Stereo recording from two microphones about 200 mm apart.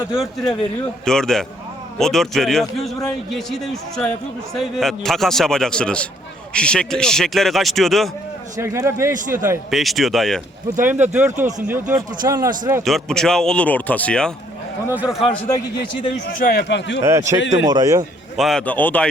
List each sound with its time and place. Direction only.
0.1 s a man's voice: centre (ahead or behind)
8.5 s a man's voice: 15° right (ahead or behind); by 10.4 s centre (ahead or behind)
10.8 s speech: 10° right (ahead or behind)
12.8 s a man's voice: centre (ahead or behind)
14.8 s a man's voice: 5° right (ahead or behind)
16.4 s speech: 50° left (ahead or behind)
17.0 s speech: 15° right (ahead or behind)
18.3 s a man's voice: centre (ahead or behind)